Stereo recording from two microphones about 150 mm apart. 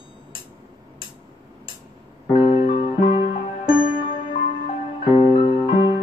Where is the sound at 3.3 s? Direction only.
70° left (ahead or behind).